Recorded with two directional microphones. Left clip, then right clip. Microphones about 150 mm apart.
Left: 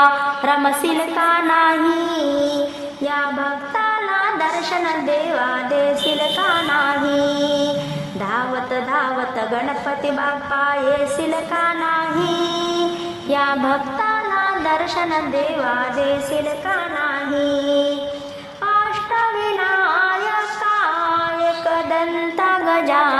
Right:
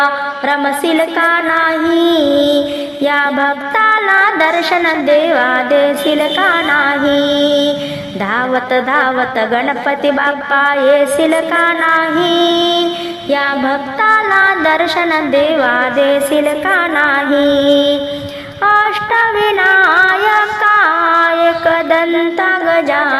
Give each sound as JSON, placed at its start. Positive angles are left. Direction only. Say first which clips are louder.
{"t": 0.0, "sound": "a sound", "louder": "right 1 dB", "side_deg": -15}
{"t": 2.1, "sound": "child singing", "louder": "right 8 dB", "side_deg": -30}
{"t": 3.0, "sound": "music", "louder": "right 8 dB", "side_deg": -30}
{"t": 14.1, "sound": "a sound", "louder": "right 11 dB", "side_deg": -30}
{"t": 18.6, "sound": "female singing", "louder": "right 7 dB", "side_deg": -30}
{"t": 22.4, "sound": "carnatic music", "louder": "right 2 dB", "side_deg": -15}